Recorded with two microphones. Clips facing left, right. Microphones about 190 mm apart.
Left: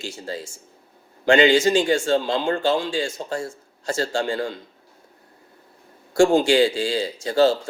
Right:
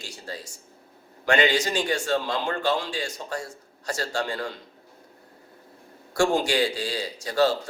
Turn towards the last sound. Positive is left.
turn(degrees=25)  # may be behind; listen again after turning